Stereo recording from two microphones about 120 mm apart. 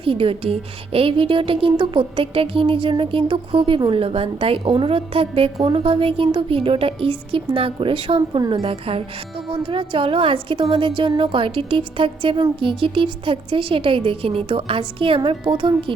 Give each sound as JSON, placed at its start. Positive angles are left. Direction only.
{"t": 0.0, "sound": "a woman's voice", "side_deg": -50}